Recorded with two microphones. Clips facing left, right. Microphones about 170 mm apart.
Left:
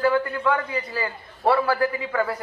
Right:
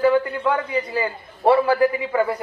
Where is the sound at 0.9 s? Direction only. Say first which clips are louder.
Right 5 dB; 15° right (ahead or behind).